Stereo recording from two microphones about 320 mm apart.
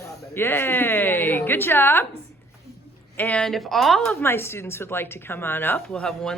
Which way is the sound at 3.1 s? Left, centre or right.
Centre.